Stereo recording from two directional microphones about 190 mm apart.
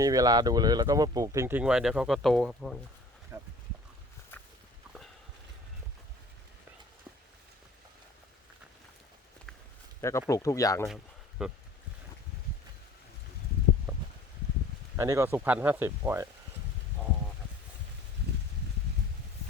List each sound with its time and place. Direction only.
0.0 s speech: 20° right (ahead or behind); by 2.7 s centre (ahead or behind)
3.3 s a sound: 15° right (ahead or behind)
10.0 s speech: 15° left (ahead or behind)
10.8 s speech: centre (ahead or behind)
13.9 s a sound: 10° right (ahead or behind)
14.9 s speech: 15° right (ahead or behind)